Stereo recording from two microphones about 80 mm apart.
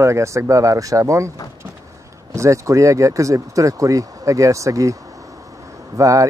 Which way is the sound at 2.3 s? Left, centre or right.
Right.